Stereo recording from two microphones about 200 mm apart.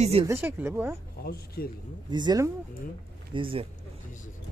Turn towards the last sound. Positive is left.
turn(degrees=-25)  # may be behind; listen again after turning